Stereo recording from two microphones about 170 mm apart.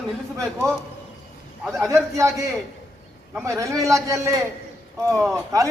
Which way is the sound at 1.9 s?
15° right (ahead or behind).